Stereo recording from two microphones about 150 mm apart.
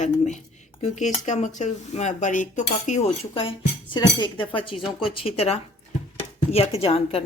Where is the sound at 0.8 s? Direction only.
50° left (ahead or behind).